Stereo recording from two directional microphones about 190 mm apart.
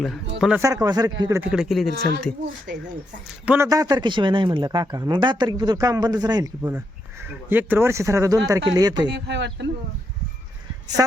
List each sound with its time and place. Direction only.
0.0 s speech: centre (ahead or behind)
0.6 s speech: 15° right (ahead or behind)
1.4 s speech: 5° right (ahead or behind)
3.4 s speech: 10° right (ahead or behind)
3.7 s speech: 20° right (ahead or behind)
9.0 s speech: 65° right (ahead or behind)